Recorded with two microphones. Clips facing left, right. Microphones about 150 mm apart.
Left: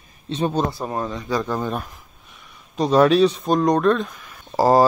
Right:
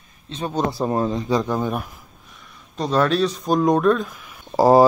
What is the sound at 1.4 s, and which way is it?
Speech, 10° right (ahead or behind).